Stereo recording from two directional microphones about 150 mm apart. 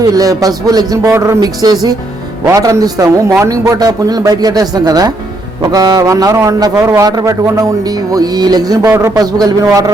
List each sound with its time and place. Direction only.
0.1 s a man's voice: 25° right (ahead or behind)